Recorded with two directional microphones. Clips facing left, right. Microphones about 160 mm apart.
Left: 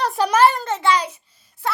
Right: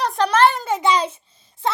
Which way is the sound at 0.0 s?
5° left (ahead or behind).